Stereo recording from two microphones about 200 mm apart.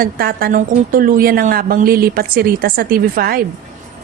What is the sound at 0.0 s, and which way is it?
A woman's voice, 45° right (ahead or behind).